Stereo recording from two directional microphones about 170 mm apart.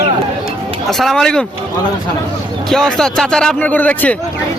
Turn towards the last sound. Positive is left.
turn(degrees=10)  # may be behind; listen again after turning